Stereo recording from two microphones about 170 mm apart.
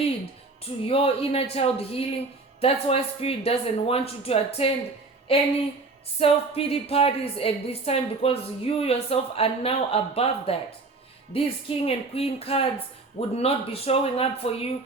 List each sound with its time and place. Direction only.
0.6 s a woman's voice: 35° left (ahead or behind)
6.1 s a woman's voice: 35° left (ahead or behind)